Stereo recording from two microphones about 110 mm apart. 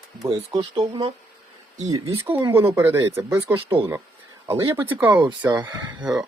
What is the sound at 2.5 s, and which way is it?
Speech, 25° right (ahead or behind).